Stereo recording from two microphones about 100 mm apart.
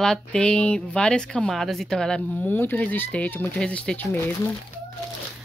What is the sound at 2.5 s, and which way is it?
Speech, 20° left (ahead or behind).